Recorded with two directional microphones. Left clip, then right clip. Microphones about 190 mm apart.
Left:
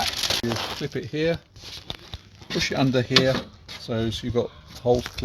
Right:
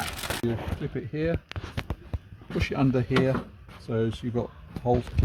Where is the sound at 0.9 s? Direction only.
40° left (ahead or behind).